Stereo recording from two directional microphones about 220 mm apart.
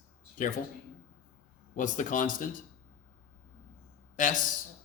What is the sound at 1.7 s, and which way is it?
Speech, 35° left (ahead or behind).